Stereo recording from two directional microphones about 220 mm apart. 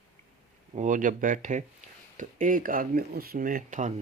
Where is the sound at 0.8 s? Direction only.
35° right (ahead or behind).